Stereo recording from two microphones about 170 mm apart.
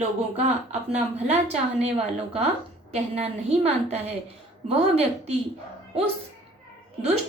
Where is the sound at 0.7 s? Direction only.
40° right (ahead or behind).